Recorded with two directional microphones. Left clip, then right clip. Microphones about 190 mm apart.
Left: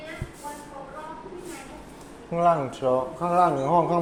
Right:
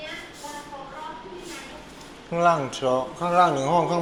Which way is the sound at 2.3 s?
Centre (ahead or behind).